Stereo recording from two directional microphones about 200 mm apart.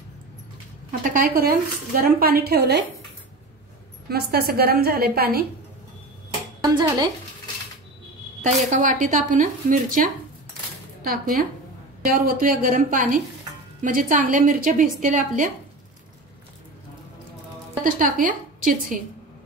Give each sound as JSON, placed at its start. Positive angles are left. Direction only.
{"t": 1.1, "sound": "a woman's voice", "side_deg": -50}
{"t": 4.1, "sound": "a woman's voice", "side_deg": -50}
{"t": 6.6, "sound": "speech", "side_deg": -20}
{"t": 8.5, "sound": "a woman's voice", "side_deg": -40}
{"t": 17.8, "sound": "a woman's voice", "side_deg": -40}